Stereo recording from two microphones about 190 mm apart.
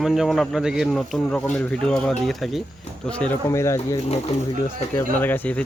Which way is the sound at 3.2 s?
10° left (ahead or behind).